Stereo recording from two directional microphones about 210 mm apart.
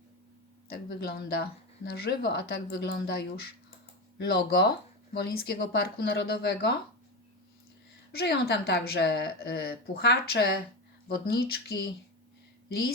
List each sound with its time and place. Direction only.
0.7 s speech: 50° left (ahead or behind)
4.3 s speech: 50° left (ahead or behind)
8.1 s speech: 50° left (ahead or behind)